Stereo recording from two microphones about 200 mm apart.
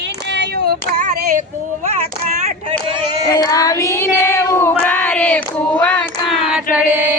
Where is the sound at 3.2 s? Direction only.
20° left (ahead or behind).